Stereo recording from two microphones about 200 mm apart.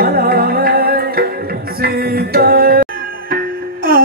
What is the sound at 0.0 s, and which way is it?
Music, 50° right (ahead or behind).